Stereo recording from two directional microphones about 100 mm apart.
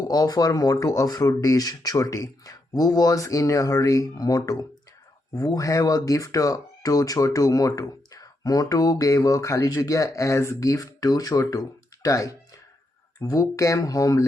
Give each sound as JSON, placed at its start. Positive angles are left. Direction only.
{"t": 0.0, "sound": "speech", "side_deg": 40}